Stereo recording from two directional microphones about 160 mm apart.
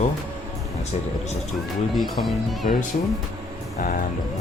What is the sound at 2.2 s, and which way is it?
Music, centre (ahead or behind).